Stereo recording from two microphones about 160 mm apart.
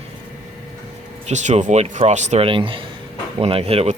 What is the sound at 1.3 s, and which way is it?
Speech, 45° right (ahead or behind).